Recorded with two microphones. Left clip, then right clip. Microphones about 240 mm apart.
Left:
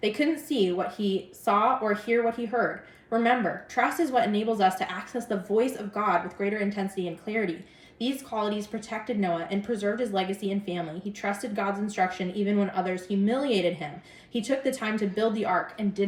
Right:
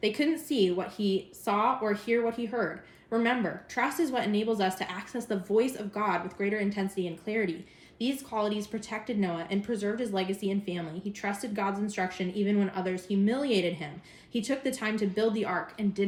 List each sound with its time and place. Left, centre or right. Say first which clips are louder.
0.0 s speech: left 2 dB; centre